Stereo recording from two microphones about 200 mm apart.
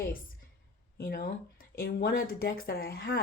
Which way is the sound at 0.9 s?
50° left (ahead or behind).